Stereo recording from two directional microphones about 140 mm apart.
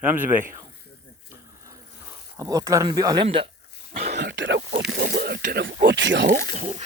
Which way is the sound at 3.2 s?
40° right (ahead or behind).